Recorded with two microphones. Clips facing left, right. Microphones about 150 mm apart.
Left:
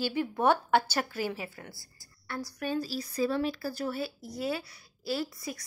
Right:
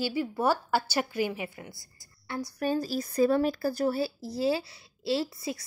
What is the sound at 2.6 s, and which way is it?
Speech, 40° right (ahead or behind).